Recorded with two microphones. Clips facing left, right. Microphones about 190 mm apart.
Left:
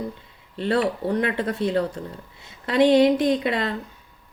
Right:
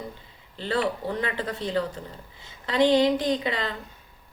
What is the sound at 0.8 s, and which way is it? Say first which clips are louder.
A woman's voice: left 3 dB; 45° left (ahead or behind).